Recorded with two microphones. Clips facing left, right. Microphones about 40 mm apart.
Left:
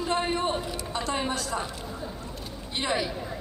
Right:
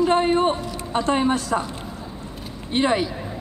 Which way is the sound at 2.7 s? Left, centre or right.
Right.